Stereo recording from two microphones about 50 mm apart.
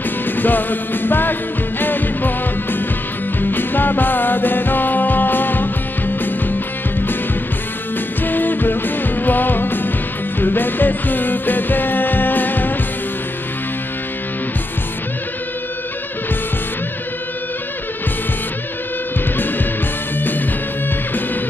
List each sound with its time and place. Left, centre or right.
0.4 s music: left
8.2 s music: left